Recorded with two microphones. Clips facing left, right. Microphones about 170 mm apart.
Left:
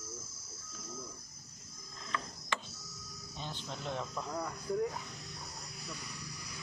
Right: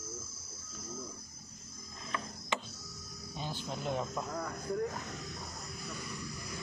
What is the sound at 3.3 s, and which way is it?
Music, 10° right (ahead or behind).